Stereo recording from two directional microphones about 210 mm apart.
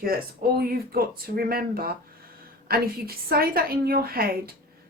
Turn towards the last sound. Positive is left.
turn(degrees=-45)  # may be behind; listen again after turning